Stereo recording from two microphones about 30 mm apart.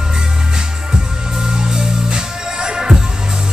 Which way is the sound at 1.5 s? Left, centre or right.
Right.